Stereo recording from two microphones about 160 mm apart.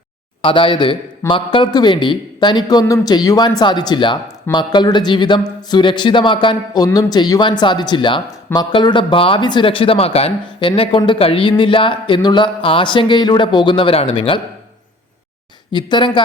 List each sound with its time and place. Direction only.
0.4 s a man's voice: 30° left (ahead or behind)
15.7 s a man's voice: 30° left (ahead or behind)